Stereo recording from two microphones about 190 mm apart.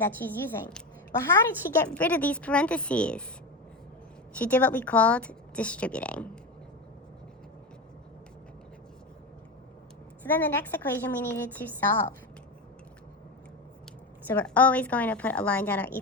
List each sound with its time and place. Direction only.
0.0 s a woman's voice: 10° left (ahead or behind)
4.4 s a woman's voice: 10° left (ahead or behind)
10.3 s a woman's voice: 10° left (ahead or behind)
14.3 s a woman's voice: 10° left (ahead or behind)